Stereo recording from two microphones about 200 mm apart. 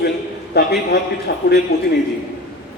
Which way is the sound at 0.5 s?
55° left (ahead or behind).